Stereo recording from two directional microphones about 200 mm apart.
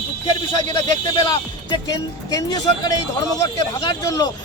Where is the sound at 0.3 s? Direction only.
20° left (ahead or behind).